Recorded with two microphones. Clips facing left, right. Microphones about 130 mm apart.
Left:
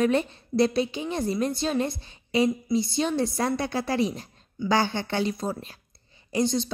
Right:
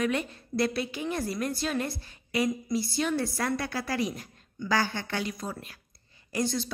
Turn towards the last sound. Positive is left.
turn(degrees=25)  # may be behind; listen again after turning